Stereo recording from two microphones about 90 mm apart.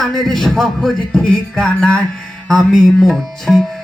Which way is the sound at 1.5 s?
10° left (ahead or behind).